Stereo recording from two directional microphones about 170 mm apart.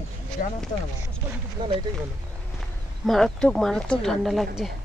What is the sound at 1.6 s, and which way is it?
Speech, 25° right (ahead or behind).